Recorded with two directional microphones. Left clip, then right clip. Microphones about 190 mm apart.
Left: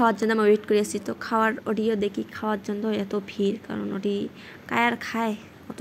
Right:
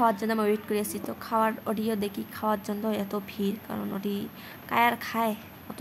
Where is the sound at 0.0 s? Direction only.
15° left (ahead or behind).